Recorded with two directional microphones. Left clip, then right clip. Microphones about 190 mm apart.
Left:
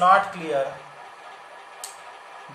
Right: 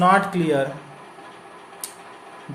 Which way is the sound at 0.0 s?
35° right (ahead or behind).